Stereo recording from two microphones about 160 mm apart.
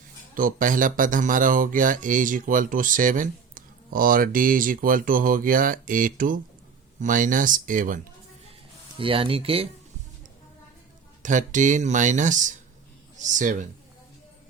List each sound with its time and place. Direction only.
0.3 s speech: 60° right (ahead or behind)
9.0 s speech: 35° right (ahead or behind)
11.2 s speech: 50° right (ahead or behind)